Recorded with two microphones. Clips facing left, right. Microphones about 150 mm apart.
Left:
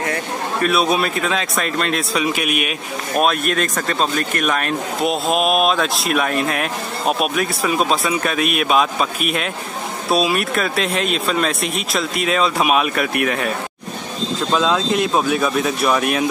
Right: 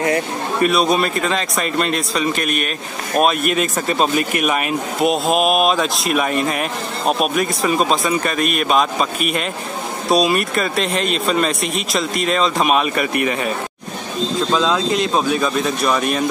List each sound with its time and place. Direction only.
0.6 s speech: centre (ahead or behind)
3.2 s speech: 5° right (ahead or behind)
14.5 s speech: 5° left (ahead or behind)